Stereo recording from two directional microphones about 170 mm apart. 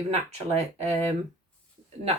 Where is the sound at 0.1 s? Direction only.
40° right (ahead or behind).